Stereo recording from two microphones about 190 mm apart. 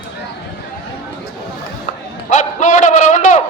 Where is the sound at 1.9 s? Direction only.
40° left (ahead or behind).